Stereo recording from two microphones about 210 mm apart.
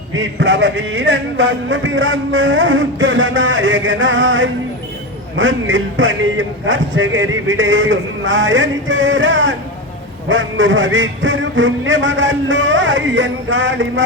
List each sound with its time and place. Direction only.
0.1 s speech: 60° right (ahead or behind)